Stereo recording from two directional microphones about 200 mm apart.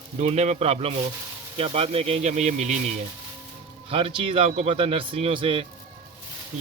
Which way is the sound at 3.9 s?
25° right (ahead or behind).